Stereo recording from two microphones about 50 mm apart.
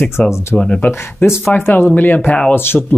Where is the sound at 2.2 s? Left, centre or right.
Left.